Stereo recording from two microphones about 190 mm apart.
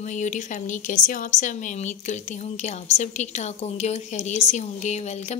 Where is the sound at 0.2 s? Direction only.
40° left (ahead or behind).